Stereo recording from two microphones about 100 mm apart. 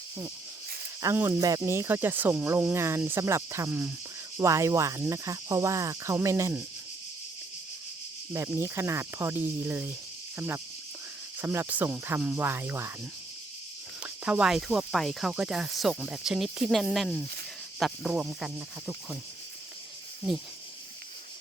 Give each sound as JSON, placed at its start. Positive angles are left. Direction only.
{"t": 1.0, "sound": "speech", "side_deg": -25}
{"t": 3.7, "sound": "speech", "side_deg": -15}
{"t": 4.4, "sound": "cricket", "side_deg": -30}
{"t": 6.2, "sound": "speech", "side_deg": -30}
{"t": 8.3, "sound": "speech", "side_deg": -25}
{"t": 12.5, "sound": "speech", "side_deg": -20}
{"t": 14.0, "sound": "speech", "side_deg": -10}